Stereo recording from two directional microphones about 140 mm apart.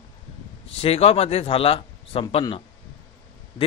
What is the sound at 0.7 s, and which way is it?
A man's voice, 45° left (ahead or behind).